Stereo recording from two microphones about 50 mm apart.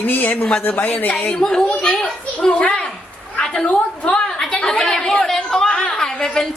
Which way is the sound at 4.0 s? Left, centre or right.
Centre.